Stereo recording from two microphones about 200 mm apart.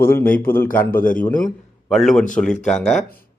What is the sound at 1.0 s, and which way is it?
Speech, 45° left (ahead or behind).